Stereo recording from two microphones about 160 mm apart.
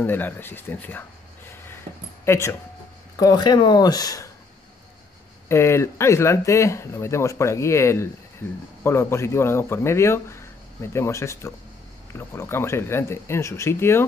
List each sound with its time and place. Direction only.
0.0 s speech: 10° left (ahead or behind)
2.2 s speech: 15° left (ahead or behind)
5.5 s speech: 15° left (ahead or behind)